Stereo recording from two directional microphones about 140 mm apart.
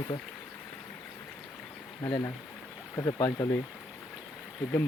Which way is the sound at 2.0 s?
25° left (ahead or behind).